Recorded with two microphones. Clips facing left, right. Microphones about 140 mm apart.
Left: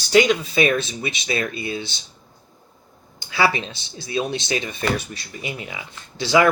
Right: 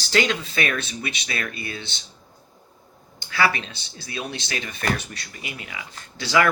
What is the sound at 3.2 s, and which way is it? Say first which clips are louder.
Speech: left 2 dB; 15° left (ahead or behind).